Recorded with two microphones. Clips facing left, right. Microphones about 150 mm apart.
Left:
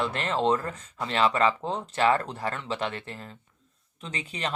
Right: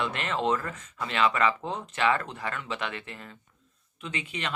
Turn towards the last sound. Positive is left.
turn(degrees=35)  # may be behind; listen again after turning